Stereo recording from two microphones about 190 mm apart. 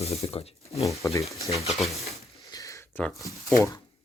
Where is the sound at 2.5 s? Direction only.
15° left (ahead or behind).